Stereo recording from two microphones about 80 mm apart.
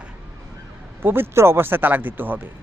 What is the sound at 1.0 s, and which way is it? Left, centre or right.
Speech, right.